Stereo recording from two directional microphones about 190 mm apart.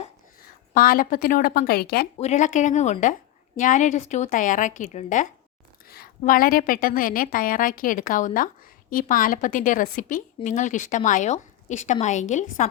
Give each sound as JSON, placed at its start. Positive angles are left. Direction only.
{"t": 0.4, "sound": "a woman's voice", "side_deg": 50}
{"t": 2.1, "sound": "a woman's voice", "side_deg": 35}